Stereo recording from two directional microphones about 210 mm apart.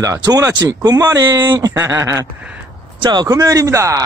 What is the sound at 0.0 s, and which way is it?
A man's voice, 15° right (ahead or behind).